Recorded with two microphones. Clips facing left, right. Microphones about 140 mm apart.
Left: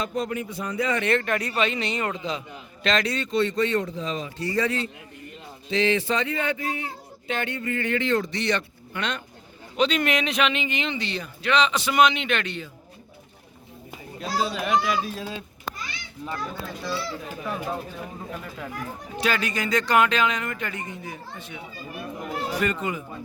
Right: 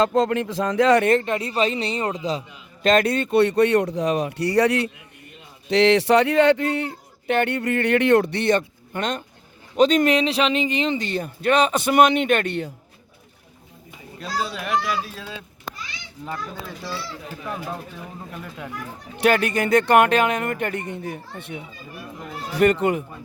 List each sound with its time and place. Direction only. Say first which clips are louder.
0.0 s speech: right 9 dB; 90° right
1.2 s speech: right 3 dB; 25° right (ahead or behind)
2.8 s speech: right 7 dB; 50° right (ahead or behind)
14.2 s a child's voice: left 1 dB; centre (ahead or behind)
19.1 s speech: right 7 dB; 60° right (ahead or behind)
22.6 s speech: right 13 dB; 65° right (ahead or behind)